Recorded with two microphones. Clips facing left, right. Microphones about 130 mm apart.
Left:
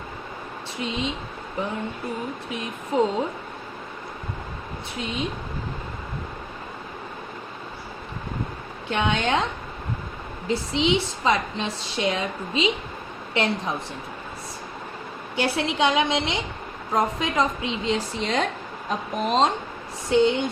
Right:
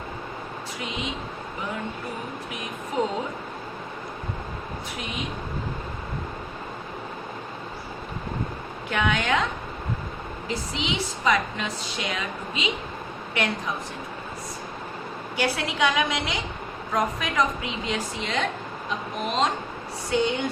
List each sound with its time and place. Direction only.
0.8 s a woman's voice: 30° left (ahead or behind)
2.9 s speech: 30° left (ahead or behind)
8.9 s a woman's voice: 25° left (ahead or behind)
10.5 s a woman's voice: 25° left (ahead or behind)
15.4 s a woman's voice: 25° left (ahead or behind)